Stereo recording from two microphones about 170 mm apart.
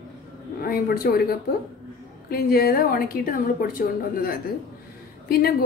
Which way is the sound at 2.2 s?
65° left (ahead or behind).